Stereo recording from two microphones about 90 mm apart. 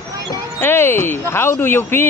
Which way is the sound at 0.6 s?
25° left (ahead or behind).